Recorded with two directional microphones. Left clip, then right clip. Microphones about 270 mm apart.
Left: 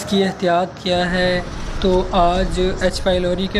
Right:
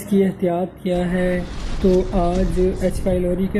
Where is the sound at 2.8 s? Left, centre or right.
Left.